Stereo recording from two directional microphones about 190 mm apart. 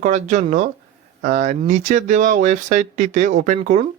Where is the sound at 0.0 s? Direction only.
40° right (ahead or behind).